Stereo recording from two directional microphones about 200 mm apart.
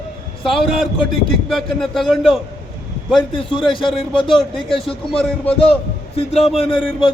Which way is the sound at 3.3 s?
25° left (ahead or behind).